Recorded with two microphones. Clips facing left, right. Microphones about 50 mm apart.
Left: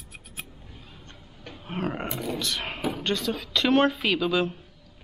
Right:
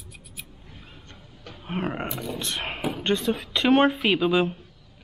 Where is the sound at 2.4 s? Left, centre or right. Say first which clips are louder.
Even; right.